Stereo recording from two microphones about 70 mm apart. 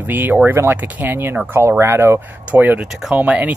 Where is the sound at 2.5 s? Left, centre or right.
Right.